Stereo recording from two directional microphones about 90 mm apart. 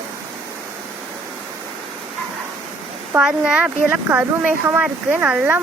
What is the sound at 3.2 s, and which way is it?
Speech, 10° right (ahead or behind).